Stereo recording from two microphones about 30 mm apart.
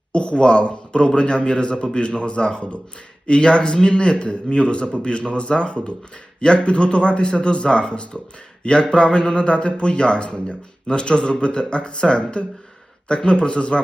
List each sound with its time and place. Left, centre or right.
0.1 s a man's voice: left